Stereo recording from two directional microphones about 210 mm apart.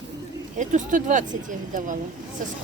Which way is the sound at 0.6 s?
35° right (ahead or behind).